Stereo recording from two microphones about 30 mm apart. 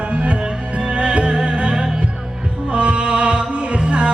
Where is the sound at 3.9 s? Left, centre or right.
Right.